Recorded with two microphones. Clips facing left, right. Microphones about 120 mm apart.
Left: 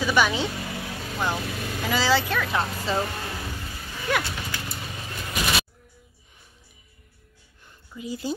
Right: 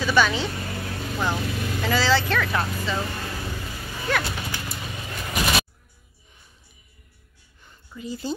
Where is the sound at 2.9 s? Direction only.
40° left (ahead or behind).